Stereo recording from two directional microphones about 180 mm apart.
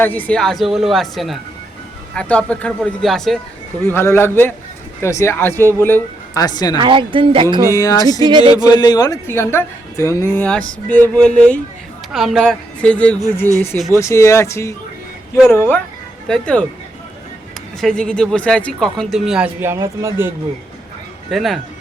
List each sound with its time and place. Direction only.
0.0 s speech: 10° left (ahead or behind)
3.8 s a woman's voice: 15° left (ahead or behind)
6.7 s a woman's voice: 25° right (ahead or behind)
7.7 s speech: 20° left (ahead or behind)
8.2 s a woman's voice: 25° right (ahead or behind)
8.6 s a woman's voice: 20° left (ahead or behind); by 16.6 s 5° left (ahead or behind)
17.7 s speech: 5° left (ahead or behind); by 20.3 s 15° right (ahead or behind)
21.2 s speech: centre (ahead or behind)